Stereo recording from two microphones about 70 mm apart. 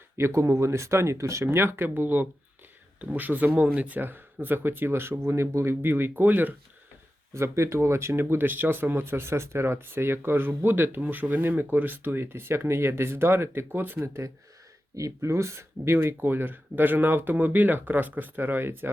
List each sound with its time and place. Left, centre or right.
0.2 s speech: right
7.3 s speech: right
14.9 s speech: right